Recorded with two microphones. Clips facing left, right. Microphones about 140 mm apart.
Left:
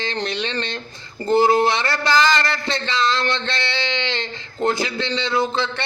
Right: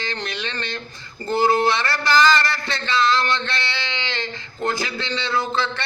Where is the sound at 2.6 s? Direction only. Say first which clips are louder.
Even; 20° left (ahead or behind).